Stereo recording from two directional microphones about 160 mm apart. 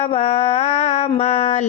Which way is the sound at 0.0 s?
40° left (ahead or behind).